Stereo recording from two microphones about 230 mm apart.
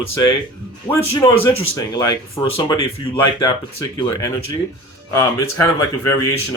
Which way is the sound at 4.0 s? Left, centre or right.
Centre.